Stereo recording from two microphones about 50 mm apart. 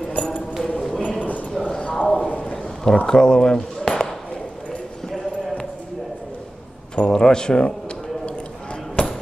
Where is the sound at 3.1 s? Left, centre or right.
Centre.